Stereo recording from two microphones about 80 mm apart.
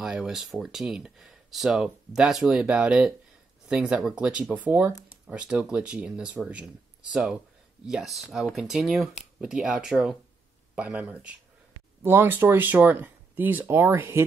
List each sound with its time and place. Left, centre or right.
0.0 s speech: centre
7.8 s speech: centre
12.0 s speech: right